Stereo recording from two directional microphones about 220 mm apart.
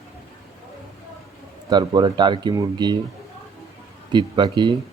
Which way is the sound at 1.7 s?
20° right (ahead or behind).